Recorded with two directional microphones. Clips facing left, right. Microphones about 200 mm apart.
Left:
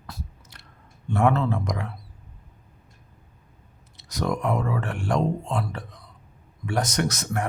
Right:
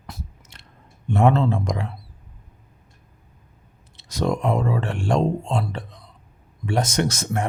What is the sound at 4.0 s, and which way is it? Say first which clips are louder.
Speech: right 3 dB; 25° right (ahead or behind).